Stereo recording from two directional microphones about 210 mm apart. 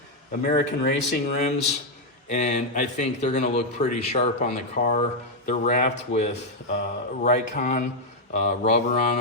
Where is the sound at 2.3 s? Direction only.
35° left (ahead or behind).